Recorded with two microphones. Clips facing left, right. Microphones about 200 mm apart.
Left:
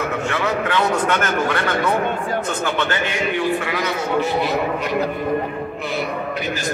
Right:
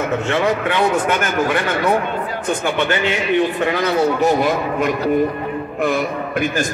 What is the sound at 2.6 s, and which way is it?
Speech, 15° right (ahead or behind).